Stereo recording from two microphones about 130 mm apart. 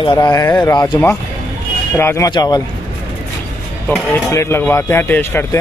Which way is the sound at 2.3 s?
30° left (ahead or behind).